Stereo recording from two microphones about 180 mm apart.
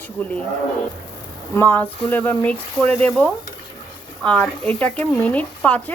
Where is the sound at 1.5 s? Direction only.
10° left (ahead or behind).